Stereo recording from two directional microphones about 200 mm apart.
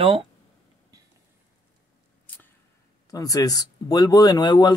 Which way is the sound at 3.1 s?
20° left (ahead or behind).